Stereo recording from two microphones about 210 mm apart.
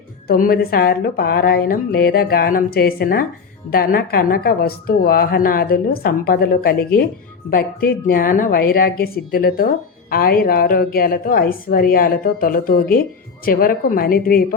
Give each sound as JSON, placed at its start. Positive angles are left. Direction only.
{"t": 0.3, "sound": "speech", "side_deg": 45}